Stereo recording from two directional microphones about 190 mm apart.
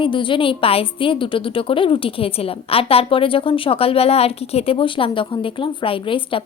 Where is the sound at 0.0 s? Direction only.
25° left (ahead or behind).